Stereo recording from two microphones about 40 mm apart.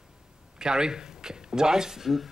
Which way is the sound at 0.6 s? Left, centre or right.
Centre.